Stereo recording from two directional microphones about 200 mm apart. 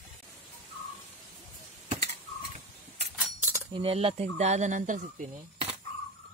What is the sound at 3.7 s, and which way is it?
Speech, 25° right (ahead or behind).